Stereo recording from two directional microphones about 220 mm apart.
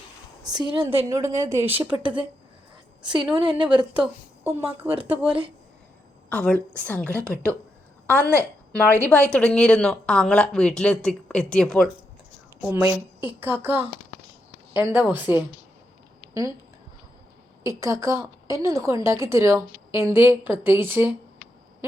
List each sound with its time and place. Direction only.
0.4 s a woman's voice: 20° right (ahead or behind)
1.0 s a woman's voice: 15° right (ahead or behind)
3.0 s a woman's voice: 20° right (ahead or behind)
4.4 s a woman's voice: 10° right (ahead or behind)
5.2 s speech: 25° right (ahead or behind)
6.3 s a woman's voice: 5° left (ahead or behind)
8.1 s a woman's voice: 10° right (ahead or behind)
9.0 s speech: 5° left (ahead or behind)
12.8 s a woman's voice: 10° right (ahead or behind)
14.8 s a woman's voice: 10° right (ahead or behind)
17.6 s a woman's voice: 15° right (ahead or behind)